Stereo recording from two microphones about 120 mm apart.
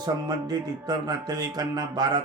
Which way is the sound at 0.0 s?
35° right (ahead or behind).